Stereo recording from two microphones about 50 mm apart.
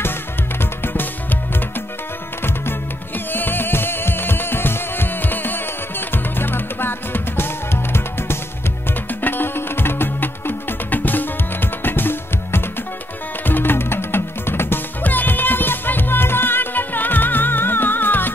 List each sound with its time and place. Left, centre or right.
0.6 s music: left
3.3 s music: left
15.0 s music: left